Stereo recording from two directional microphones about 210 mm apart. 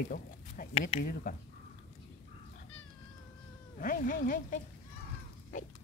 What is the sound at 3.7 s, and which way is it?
Speech, 40° left (ahead or behind).